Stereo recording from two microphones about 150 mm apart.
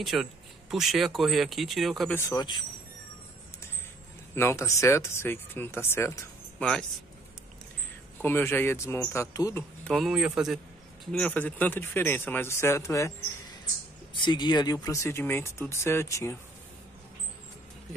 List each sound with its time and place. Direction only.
0.0 s speech: centre (ahead or behind)
2.1 s speech: 20° left (ahead or behind)
4.4 s speech: 20° left (ahead or behind)
6.6 s speech: 5° left (ahead or behind)
8.2 s speech: 15° left (ahead or behind)
9.8 s speech: centre (ahead or behind)
11.1 s speech: 5° left (ahead or behind)
14.1 s speech: 30° left (ahead or behind)